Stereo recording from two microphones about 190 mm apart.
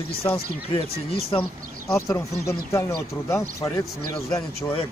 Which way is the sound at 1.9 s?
15° left (ahead or behind).